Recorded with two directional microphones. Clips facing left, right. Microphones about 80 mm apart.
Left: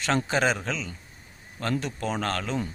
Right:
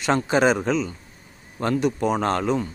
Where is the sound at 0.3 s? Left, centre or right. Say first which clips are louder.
Right 6 dB; centre.